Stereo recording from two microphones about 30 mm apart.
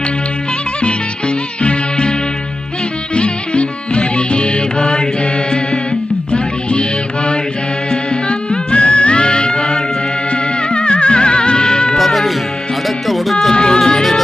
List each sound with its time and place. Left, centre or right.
1.6 s music: left
3.2 s music: left
6.3 s music: left
7.9 s music: left
11.9 s music: centre
13.5 s music: left